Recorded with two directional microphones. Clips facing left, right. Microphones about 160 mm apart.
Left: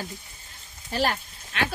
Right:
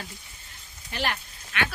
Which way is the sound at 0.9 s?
35° left (ahead or behind).